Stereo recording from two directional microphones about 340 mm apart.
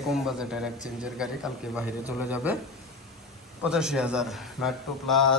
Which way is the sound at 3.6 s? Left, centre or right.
Centre.